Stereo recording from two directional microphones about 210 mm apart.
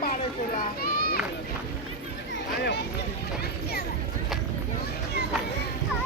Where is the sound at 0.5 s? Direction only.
45° left (ahead or behind).